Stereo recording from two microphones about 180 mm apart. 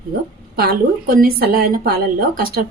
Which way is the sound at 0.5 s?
55° right (ahead or behind).